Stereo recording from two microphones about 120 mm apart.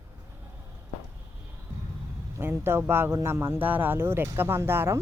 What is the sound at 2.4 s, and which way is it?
Speech, 20° right (ahead or behind).